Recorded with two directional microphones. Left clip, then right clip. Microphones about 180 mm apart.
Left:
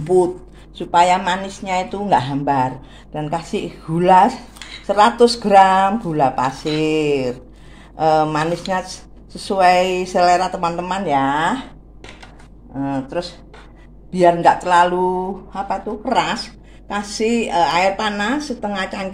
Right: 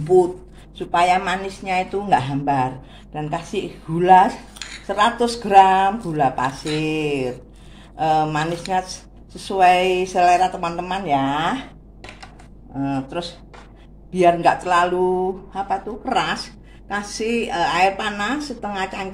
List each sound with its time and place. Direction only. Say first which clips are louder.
0.0 s speech: even; 30° left (ahead or behind)
4.6 s dishes: even; 10° right (ahead or behind)
4.8 s speech: left 6 dB; 30° left (ahead or behind)
12.7 s speech: left 2 dB; 15° left (ahead or behind)
14.1 s speech: left 3 dB; 30° left (ahead or behind)